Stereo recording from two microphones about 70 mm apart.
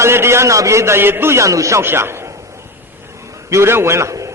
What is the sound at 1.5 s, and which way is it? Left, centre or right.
Speech, right.